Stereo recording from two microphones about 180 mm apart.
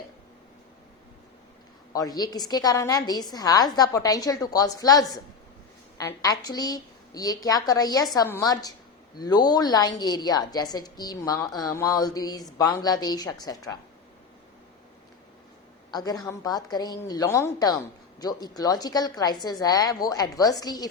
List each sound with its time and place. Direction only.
1.9 s a woman's voice: 20° left (ahead or behind)
15.9 s a woman's voice: 20° left (ahead or behind)